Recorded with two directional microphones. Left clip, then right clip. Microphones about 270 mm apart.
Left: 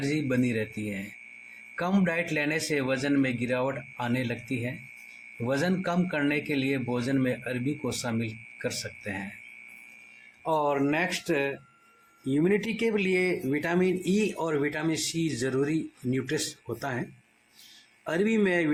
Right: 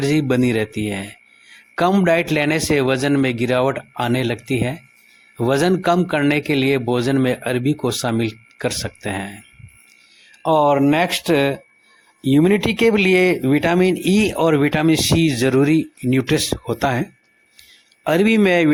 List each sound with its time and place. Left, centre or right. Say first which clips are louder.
0.0 s speech: right 10 dB; right
1.7 s speech: right 12 dB; right
10.4 s speech: right 11 dB; right